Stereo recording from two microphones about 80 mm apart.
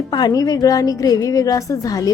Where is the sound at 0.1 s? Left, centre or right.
Left.